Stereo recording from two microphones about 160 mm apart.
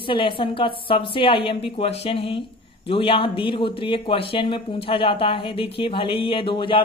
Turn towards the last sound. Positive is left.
turn(degrees=30)  # may be behind; listen again after turning